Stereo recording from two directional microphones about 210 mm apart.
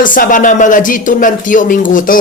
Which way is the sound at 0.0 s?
40° left (ahead or behind).